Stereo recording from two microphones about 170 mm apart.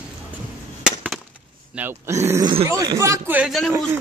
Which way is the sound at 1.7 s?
10° right (ahead or behind).